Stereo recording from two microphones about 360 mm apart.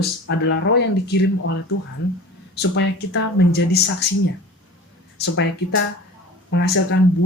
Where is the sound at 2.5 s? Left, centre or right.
Left.